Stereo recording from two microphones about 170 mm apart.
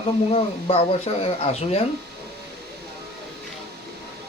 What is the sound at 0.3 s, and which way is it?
Speech, 35° left (ahead or behind).